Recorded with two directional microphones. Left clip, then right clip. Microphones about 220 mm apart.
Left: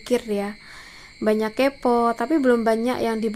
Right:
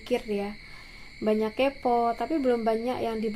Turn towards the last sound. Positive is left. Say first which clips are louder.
# left 6 dB
turn(degrees=35)  # may be behind; listen again after turning